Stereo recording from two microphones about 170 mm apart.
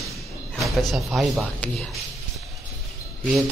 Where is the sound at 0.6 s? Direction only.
Centre (ahead or behind).